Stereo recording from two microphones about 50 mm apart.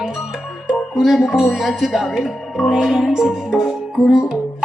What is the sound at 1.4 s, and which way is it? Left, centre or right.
Speech, centre.